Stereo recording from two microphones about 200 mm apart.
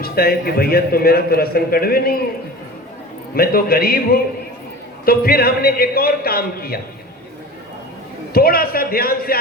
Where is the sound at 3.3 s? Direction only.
50° left (ahead or behind).